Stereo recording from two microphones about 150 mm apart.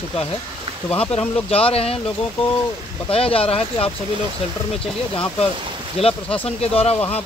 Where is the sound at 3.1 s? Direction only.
40° left (ahead or behind).